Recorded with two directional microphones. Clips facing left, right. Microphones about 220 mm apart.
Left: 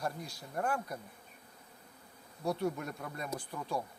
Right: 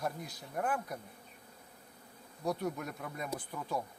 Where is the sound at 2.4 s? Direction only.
Centre (ahead or behind).